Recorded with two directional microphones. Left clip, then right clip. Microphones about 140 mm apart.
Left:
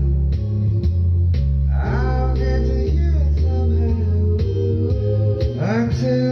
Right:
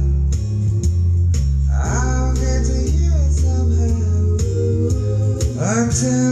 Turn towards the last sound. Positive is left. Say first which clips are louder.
# right 1 dB
turn(degrees=25)  # may be behind; listen again after turning